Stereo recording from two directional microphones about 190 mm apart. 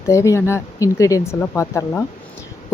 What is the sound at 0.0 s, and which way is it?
Speech, 15° left (ahead or behind).